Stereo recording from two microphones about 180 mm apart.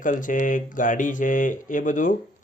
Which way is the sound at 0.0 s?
45° left (ahead or behind).